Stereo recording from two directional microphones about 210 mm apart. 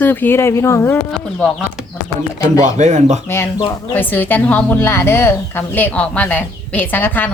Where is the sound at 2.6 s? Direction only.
35° right (ahead or behind).